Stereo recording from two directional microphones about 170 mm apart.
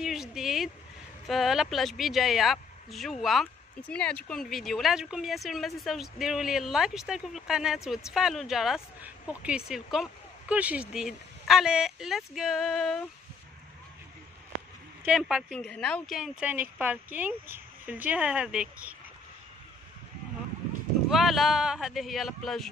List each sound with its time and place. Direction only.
0.0 s a sound: centre (ahead or behind)
1.2 s speech: centre (ahead or behind)
15.0 s speech: 5° right (ahead or behind)
21.1 s speech: centre (ahead or behind)